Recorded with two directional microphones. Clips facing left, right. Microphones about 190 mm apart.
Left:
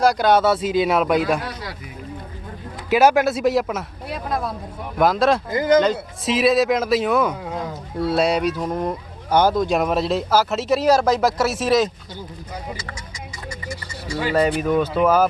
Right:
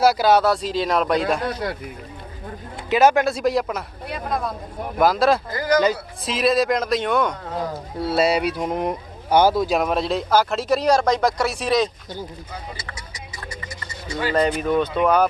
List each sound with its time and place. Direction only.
0.0 s speech: 5° right (ahead or behind)
1.6 s speech: 55° right (ahead or behind)
2.9 s speech: 5° left (ahead or behind)
5.5 s speech: 20° left (ahead or behind)
5.8 s speech: centre (ahead or behind)
14.2 s speech: 10° left (ahead or behind)